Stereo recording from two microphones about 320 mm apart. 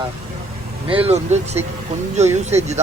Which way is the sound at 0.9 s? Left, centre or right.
Centre.